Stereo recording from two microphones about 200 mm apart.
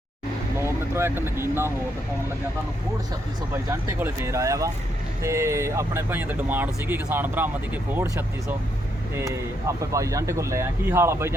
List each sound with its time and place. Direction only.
0.6 s speech: 10° right (ahead or behind)
3.5 s speech: 15° right (ahead or behind)